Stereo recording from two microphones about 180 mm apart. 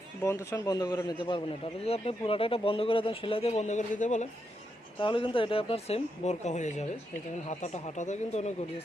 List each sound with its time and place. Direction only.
0.2 s a man's voice: 15° left (ahead or behind); by 4.3 s 45° left (ahead or behind)
4.9 s speech: 30° left (ahead or behind)